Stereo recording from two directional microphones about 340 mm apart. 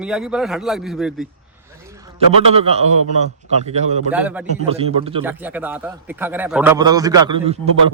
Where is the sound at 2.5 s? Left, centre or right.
Centre.